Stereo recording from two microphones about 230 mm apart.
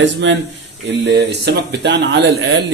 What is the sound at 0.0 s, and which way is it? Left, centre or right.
Speech, right.